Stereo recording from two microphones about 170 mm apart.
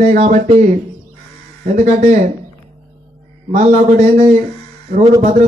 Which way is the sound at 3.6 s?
40° right (ahead or behind).